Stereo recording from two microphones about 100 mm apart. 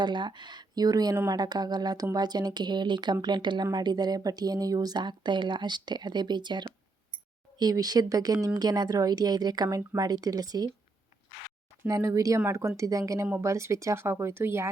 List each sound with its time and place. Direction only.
0.0 s speech: 50° right (ahead or behind)
11.8 s speech: 30° right (ahead or behind)